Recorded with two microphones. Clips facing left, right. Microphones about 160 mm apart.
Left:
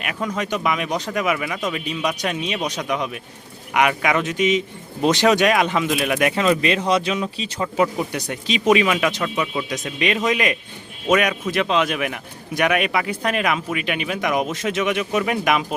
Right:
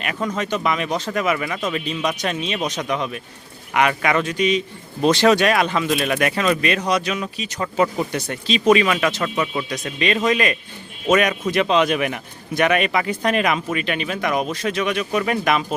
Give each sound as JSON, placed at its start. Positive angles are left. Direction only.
{"t": 0.0, "sound": "a man's voice", "side_deg": 5}
{"t": 7.6, "sound": "a man's voice", "side_deg": 10}
{"t": 9.6, "sound": "a man's voice", "side_deg": 20}